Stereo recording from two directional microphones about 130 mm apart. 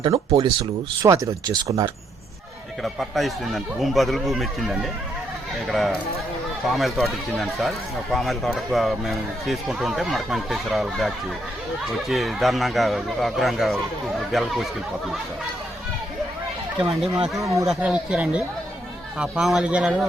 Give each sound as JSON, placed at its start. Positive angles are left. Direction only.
{"t": 0.0, "sound": "speech", "side_deg": -45}
{"t": 1.0, "sound": "speech", "side_deg": -25}
{"t": 2.8, "sound": "speech", "side_deg": 0}
{"t": 17.4, "sound": "speech", "side_deg": -25}
{"t": 17.7, "sound": "speech", "side_deg": -10}